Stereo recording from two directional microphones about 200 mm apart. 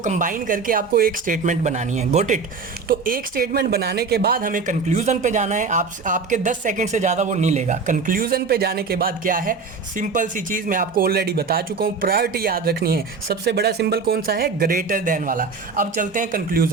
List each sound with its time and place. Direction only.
0.0 s speech: 40° right (ahead or behind)